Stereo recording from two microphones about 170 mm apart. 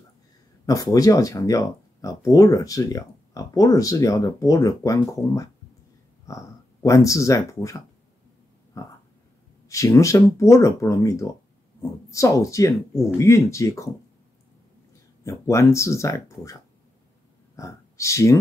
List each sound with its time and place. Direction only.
0.7 s speech: 20° left (ahead or behind)
8.8 s a sound: 20° left (ahead or behind)
9.7 s speech: 20° left (ahead or behind)
15.2 s speech: 15° left (ahead or behind)
17.6 s speech: 15° left (ahead or behind)